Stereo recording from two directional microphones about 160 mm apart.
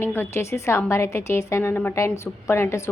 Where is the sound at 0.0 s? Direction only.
15° left (ahead or behind).